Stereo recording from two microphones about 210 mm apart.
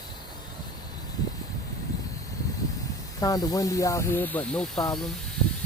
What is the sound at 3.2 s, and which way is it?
Speech, 15° left (ahead or behind).